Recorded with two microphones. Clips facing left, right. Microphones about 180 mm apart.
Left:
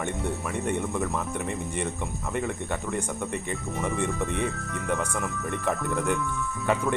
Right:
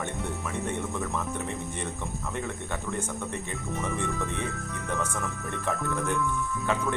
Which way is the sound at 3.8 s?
15° left (ahead or behind).